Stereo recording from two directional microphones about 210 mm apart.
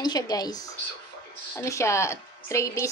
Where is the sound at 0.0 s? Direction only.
20° left (ahead or behind).